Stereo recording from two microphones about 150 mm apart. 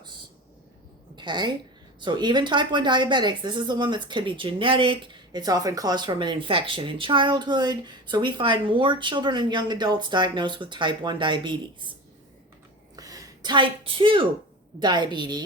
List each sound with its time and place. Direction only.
1.1 s a woman's voice: 30° right (ahead or behind)
13.0 s a woman's voice: 25° right (ahead or behind)